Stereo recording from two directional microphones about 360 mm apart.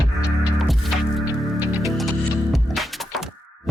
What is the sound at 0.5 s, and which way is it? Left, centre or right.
Music, centre.